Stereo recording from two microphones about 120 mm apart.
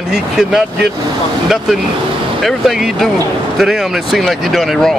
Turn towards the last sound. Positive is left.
turn(degrees=0)  # may be behind; listen again after turning